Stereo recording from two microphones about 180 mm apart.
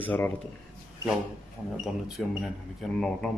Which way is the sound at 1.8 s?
Centre (ahead or behind).